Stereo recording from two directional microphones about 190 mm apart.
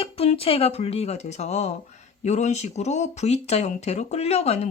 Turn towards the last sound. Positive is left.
turn(degrees=35)  # may be behind; listen again after turning